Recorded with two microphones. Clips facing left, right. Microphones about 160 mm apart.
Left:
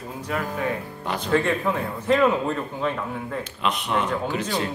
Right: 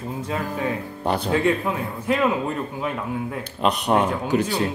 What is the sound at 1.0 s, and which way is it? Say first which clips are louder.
Speech: right 6 dB; 35° right (ahead or behind).